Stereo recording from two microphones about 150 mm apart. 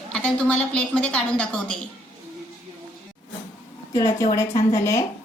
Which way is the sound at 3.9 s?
20° left (ahead or behind).